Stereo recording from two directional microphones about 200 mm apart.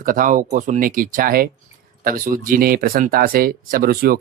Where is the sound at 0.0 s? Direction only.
40° right (ahead or behind).